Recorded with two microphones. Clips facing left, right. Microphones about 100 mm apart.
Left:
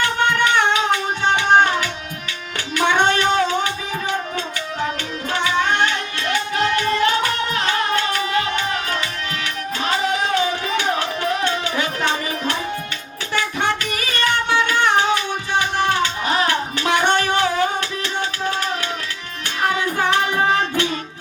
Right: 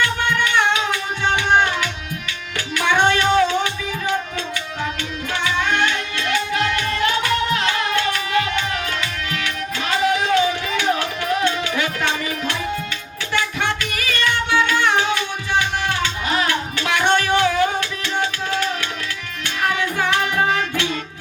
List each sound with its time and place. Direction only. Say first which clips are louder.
0.0 s music: left 2 dB; 45° left (ahead or behind)
5.3 s music: left 2 dB; 35° left (ahead or behind)
19.6 s child singing: left 1 dB; 35° left (ahead or behind)